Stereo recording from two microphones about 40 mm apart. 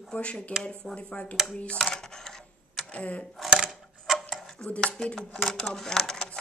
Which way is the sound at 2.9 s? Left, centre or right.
Left.